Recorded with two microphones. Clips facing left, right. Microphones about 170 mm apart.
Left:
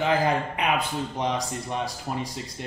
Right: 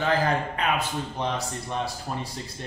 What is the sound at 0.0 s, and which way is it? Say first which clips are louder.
A man's voice: left 1 dB; 15° left (ahead or behind).